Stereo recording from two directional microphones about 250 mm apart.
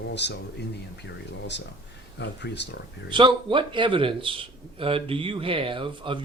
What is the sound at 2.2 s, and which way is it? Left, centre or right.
Speech, left.